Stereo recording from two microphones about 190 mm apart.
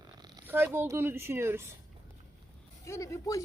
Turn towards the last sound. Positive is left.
turn(degrees=15)  # may be behind; listen again after turning